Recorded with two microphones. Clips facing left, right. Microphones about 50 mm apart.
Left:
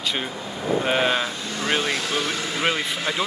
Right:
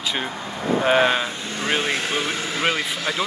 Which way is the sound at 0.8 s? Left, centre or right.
Centre.